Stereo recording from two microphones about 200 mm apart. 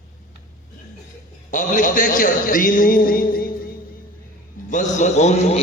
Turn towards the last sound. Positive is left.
turn(degrees=35)  # may be behind; listen again after turning